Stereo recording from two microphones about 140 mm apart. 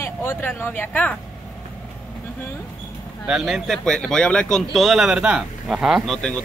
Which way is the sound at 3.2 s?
Centre (ahead or behind).